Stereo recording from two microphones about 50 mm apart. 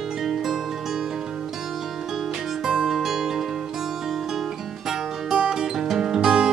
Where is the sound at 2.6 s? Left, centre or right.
Centre.